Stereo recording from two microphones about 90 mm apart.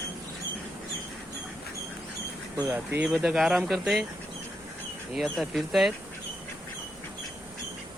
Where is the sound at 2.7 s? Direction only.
15° right (ahead or behind).